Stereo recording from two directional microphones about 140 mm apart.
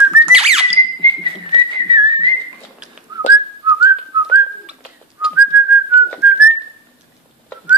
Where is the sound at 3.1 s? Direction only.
30° right (ahead or behind); by 6.5 s 15° right (ahead or behind).